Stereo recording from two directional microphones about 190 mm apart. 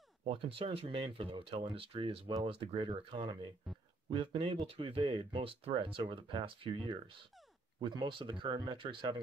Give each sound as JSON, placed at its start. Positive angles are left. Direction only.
{"t": 0.2, "sound": "speech", "side_deg": -30}